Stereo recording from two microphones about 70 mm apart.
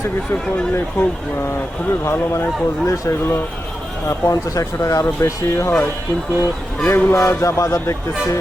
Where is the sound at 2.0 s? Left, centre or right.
Left.